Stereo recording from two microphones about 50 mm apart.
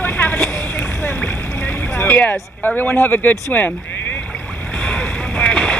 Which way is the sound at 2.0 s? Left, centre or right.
Left.